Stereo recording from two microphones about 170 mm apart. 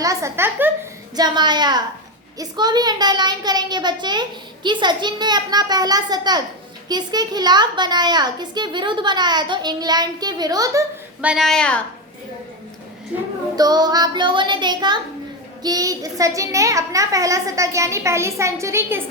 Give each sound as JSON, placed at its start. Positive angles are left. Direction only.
{"t": 0.0, "sound": "a woman's voice", "side_deg": -20}
{"t": 1.1, "sound": "a child's voice", "side_deg": -25}
{"t": 11.2, "sound": "speech", "side_deg": -5}
{"t": 13.6, "sound": "a child's voice", "side_deg": -25}